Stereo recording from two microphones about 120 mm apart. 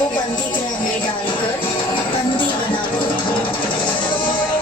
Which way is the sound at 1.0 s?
45° left (ahead or behind).